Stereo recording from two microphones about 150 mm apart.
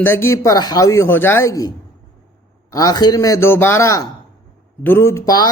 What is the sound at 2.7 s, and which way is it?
A man's voice, 25° left (ahead or behind).